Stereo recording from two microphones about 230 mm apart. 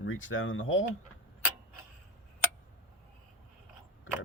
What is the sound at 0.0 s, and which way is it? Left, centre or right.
Speech, left.